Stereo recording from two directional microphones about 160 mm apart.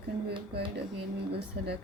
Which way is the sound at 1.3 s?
90° right.